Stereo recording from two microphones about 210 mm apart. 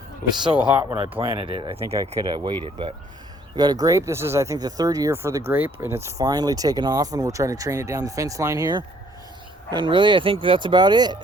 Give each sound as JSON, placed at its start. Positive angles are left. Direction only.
{"t": 0.3, "sound": "speech", "side_deg": -20}